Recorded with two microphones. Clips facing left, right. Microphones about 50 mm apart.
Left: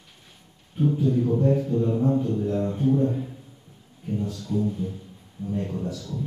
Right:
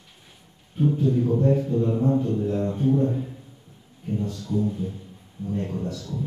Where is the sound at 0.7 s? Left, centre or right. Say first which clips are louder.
Right 1 dB; centre.